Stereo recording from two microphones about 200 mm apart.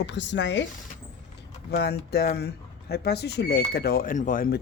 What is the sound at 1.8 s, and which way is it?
Speech, 55° left (ahead or behind).